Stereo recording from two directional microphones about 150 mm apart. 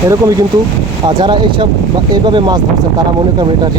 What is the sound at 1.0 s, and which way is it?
Speech, 30° right (ahead or behind).